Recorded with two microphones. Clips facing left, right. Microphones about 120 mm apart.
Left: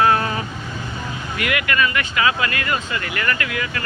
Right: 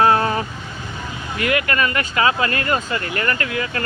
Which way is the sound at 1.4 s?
35° right (ahead or behind).